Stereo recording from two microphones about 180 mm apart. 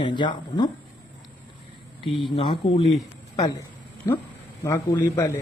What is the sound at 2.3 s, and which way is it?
Speech, 30° left (ahead or behind).